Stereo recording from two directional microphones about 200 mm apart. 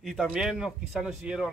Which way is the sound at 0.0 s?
Centre (ahead or behind).